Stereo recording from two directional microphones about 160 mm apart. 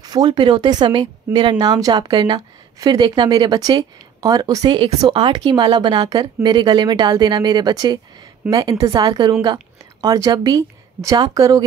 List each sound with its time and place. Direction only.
0.0 s speech: 25° right (ahead or behind)